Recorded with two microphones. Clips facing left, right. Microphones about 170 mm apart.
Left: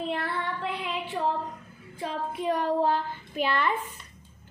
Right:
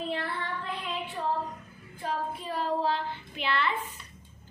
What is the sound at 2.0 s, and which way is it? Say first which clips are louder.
Child singing: left 2 dB; 70° left (ahead or behind).